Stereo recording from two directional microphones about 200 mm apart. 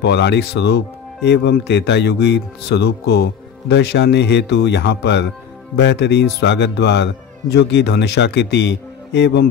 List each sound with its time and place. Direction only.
0.0 s speech: 60° left (ahead or behind)